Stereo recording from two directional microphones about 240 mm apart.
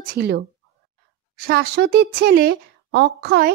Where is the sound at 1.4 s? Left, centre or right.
Right.